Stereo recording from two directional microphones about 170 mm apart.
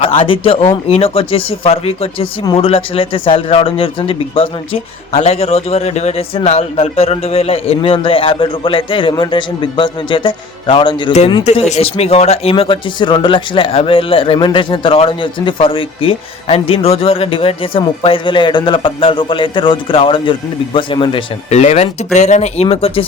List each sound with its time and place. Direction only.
0.0 s speech: 35° left (ahead or behind)
11.4 s speech: 40° left (ahead or behind)
21.6 s speech: 45° left (ahead or behind)